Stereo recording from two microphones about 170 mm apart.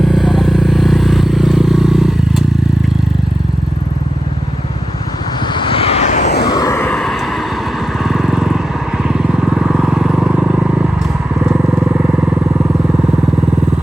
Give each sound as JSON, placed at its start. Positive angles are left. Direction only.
{"t": 0.0, "sound": "vehicle", "side_deg": 0}
{"t": 5.5, "sound": "vehicle", "side_deg": 30}
{"t": 6.4, "sound": "a sound", "side_deg": 25}
{"t": 6.9, "sound": "vehicle", "side_deg": 0}